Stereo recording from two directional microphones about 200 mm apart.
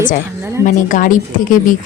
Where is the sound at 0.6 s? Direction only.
40° left (ahead or behind).